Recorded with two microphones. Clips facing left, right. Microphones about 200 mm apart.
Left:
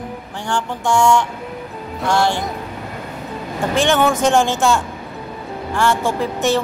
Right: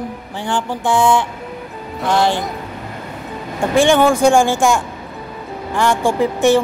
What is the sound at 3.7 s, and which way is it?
A woman's voice, 15° right (ahead or behind).